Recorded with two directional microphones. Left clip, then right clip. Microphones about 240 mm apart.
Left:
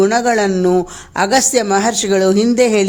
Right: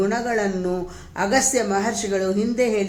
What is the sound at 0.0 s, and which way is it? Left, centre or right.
A woman's voice, left.